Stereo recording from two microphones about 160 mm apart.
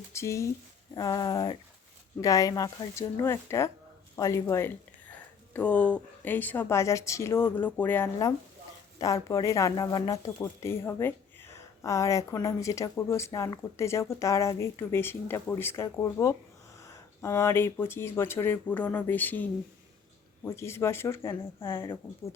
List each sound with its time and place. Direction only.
0.1 s speech: 15° left (ahead or behind)